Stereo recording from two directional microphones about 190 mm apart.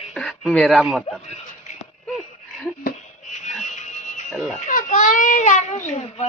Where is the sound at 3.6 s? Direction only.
40° left (ahead or behind).